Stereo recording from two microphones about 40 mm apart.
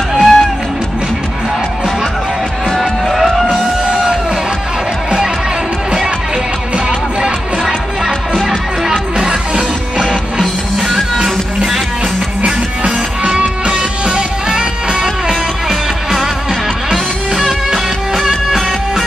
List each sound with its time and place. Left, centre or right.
0.1 s music: centre
2.8 s music: centre
3.8 s music: right
6.9 s music: right
8.5 s music: centre
12.8 s music: right
15.2 s music: centre
17.5 s music: centre